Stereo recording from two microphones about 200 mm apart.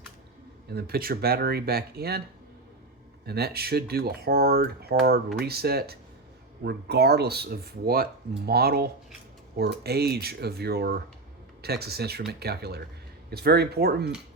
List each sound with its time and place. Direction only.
0.7 s speech: 50° right (ahead or behind)
3.2 s speech: 55° right (ahead or behind)